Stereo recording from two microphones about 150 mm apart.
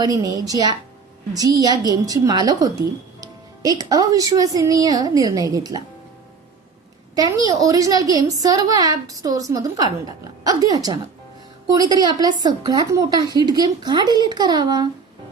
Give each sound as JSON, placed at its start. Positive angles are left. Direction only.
{"t": 0.0, "sound": "a woman's voice", "side_deg": -25}
{"t": 7.2, "sound": "a woman's voice", "side_deg": -25}